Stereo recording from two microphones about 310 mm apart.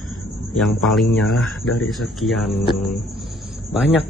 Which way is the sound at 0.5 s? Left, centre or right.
Centre.